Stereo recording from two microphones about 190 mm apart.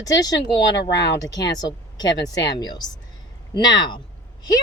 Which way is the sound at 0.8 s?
65° left (ahead or behind).